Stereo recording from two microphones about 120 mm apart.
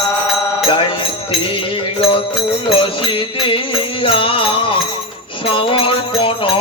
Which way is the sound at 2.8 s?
45° left (ahead or behind).